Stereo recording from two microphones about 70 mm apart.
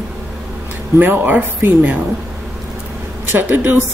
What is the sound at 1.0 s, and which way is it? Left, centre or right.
Speech, right.